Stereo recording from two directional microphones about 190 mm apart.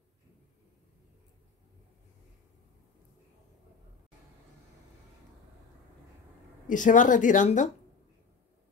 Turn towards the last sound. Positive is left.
turn(degrees=40)  # may be behind; listen again after turning